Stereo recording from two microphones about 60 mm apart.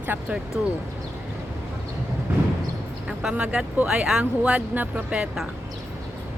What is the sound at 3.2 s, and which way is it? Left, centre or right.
Speech, centre.